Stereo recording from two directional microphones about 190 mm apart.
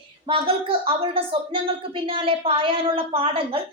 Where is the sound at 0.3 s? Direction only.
30° right (ahead or behind).